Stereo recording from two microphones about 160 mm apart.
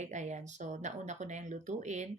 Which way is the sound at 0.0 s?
50° right (ahead or behind).